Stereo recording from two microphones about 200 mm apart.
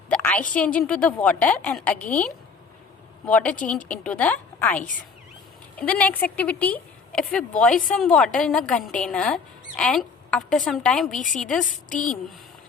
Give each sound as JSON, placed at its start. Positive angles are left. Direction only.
{"t": 0.1, "sound": "a sound", "side_deg": 5}
{"t": 0.5, "sound": "a woman's voice", "side_deg": 5}
{"t": 11.7, "sound": "a woman's voice", "side_deg": 40}